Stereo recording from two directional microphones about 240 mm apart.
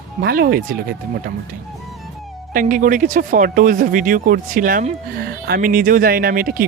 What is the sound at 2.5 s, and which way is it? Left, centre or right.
Speech, right.